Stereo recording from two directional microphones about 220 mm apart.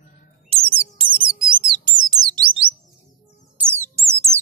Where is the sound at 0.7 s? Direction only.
25° right (ahead or behind).